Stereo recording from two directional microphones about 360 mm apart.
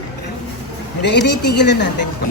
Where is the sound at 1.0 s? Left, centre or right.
Left.